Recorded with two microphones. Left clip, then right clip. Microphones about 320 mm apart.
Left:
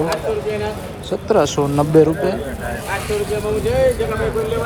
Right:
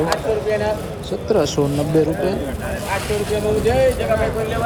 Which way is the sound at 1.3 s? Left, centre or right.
Centre.